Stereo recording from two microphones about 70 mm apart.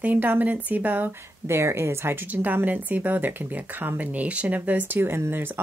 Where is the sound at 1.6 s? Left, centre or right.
Right.